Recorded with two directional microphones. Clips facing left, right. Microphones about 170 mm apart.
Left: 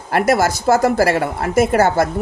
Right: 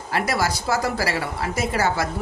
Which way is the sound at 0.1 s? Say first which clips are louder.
Left 8 dB; 50° left (ahead or behind).